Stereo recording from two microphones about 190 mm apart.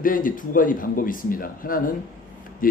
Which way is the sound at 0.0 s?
45° left (ahead or behind).